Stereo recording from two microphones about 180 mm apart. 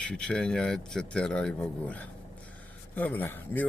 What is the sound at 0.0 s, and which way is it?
A man's voice, 5° left (ahead or behind).